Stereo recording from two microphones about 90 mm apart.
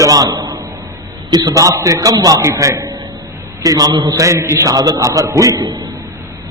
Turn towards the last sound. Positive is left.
turn(degrees=-45)  # may be behind; listen again after turning